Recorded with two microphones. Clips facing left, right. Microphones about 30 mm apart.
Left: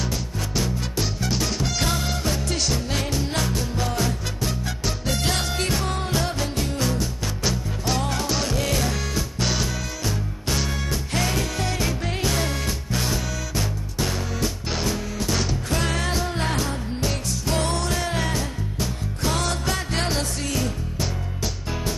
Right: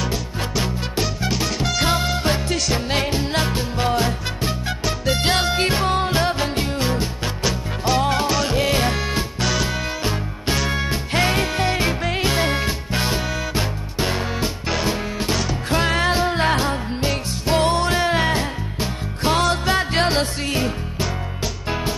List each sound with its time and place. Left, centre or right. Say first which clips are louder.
0.1 s music: right 3 dB; right